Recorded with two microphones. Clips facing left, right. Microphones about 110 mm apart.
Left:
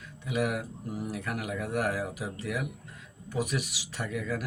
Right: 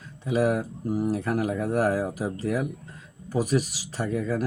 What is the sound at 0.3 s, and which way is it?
Speech, 35° right (ahead or behind).